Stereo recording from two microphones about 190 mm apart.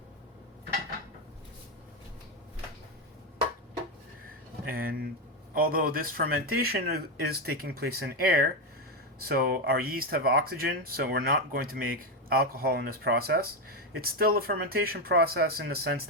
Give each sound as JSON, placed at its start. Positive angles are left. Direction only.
{"t": 4.6, "sound": "speech", "side_deg": -50}